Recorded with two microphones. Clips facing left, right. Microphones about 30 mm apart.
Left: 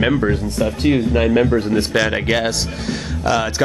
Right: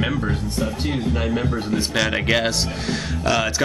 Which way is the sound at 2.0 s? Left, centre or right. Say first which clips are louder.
Even; centre.